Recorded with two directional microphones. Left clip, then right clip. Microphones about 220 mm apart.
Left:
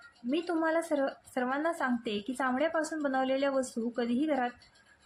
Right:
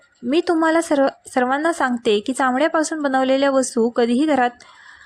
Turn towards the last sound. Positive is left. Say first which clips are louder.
# right 13 dB
turn(degrees=-40)  # may be behind; listen again after turning